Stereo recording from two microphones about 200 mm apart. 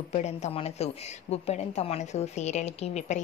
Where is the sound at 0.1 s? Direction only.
35° left (ahead or behind).